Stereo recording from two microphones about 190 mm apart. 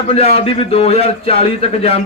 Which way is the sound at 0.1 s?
30° left (ahead or behind).